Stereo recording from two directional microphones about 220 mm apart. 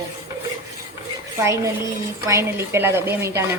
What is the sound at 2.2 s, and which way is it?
Speech, 10° right (ahead or behind).